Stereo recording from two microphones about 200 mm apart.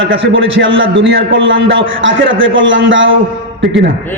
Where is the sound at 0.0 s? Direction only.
70° right (ahead or behind).